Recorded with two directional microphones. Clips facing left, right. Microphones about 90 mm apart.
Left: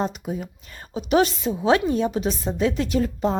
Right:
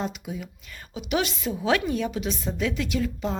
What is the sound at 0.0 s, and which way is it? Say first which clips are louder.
A woman's voice: left 5 dB; 40° left (ahead or behind).